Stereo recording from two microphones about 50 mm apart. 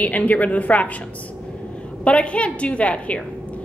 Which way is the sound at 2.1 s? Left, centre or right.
Left.